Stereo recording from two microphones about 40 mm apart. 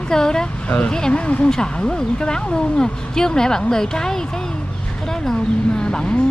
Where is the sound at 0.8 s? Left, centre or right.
Centre.